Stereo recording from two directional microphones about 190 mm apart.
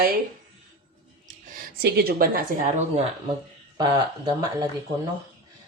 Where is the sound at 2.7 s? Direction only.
35° right (ahead or behind).